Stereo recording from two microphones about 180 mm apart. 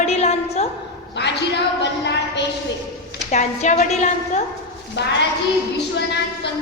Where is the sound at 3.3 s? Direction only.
40° left (ahead or behind).